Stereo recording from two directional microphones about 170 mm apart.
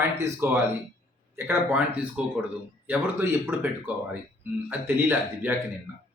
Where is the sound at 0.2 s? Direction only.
15° right (ahead or behind).